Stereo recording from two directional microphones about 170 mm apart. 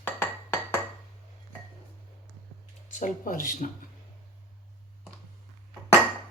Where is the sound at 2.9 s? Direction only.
50° left (ahead or behind).